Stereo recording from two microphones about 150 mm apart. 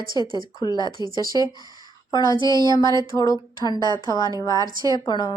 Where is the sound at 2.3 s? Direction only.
30° right (ahead or behind).